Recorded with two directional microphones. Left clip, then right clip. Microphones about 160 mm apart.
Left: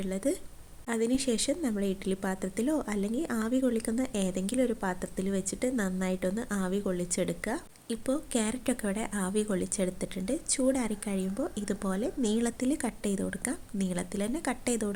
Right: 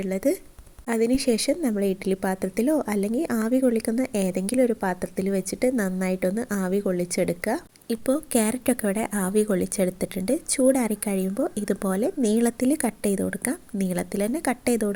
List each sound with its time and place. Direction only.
0.0 s a woman's voice: 15° right (ahead or behind)